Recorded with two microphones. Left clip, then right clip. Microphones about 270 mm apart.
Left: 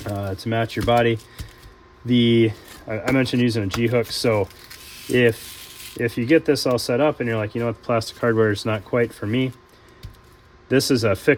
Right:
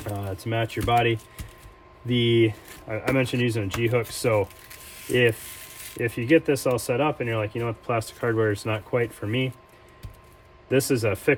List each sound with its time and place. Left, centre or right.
0.1 s speech: left
10.7 s speech: left